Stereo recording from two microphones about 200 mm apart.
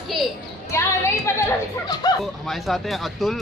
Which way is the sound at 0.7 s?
15° left (ahead or behind).